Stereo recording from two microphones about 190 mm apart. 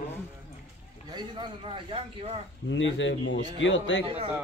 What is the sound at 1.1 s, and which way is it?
Speech, 25° right (ahead or behind).